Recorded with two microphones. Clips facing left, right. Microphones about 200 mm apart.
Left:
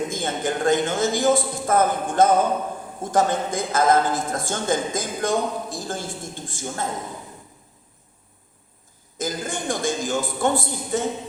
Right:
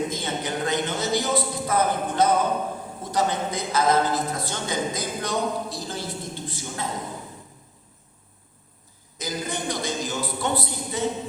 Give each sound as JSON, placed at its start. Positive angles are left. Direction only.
{"t": 0.1, "sound": "a man's voice", "side_deg": 50}
{"t": 9.1, "sound": "a man's voice", "side_deg": 50}